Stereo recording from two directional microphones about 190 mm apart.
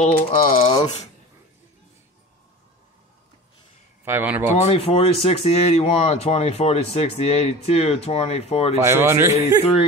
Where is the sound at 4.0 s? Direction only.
10° right (ahead or behind).